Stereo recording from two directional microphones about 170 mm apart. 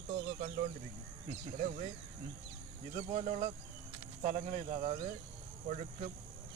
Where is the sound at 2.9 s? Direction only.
40° right (ahead or behind).